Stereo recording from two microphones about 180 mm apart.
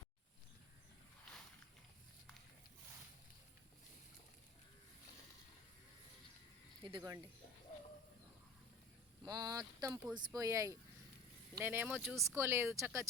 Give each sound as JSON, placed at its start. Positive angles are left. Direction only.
{"t": 6.8, "sound": "speech", "side_deg": -25}
{"t": 9.2, "sound": "speech", "side_deg": -20}